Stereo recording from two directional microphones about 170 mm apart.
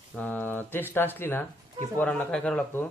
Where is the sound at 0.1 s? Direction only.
10° left (ahead or behind).